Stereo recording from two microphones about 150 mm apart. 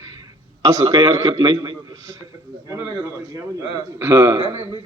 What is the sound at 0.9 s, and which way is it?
A man's voice, 25° right (ahead or behind).